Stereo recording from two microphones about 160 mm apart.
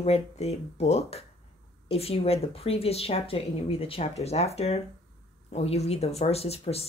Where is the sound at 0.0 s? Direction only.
40° left (ahead or behind).